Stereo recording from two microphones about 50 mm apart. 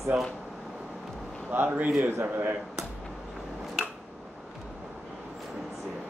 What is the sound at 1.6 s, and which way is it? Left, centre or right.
Speech, right.